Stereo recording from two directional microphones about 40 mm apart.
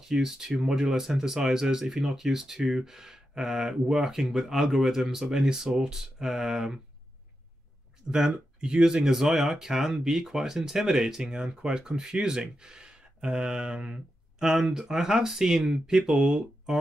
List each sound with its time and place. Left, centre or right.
0.1 s speech: centre
8.1 s speech: right
9.1 s speech: centre; by 14.0 s right
14.4 s speech: centre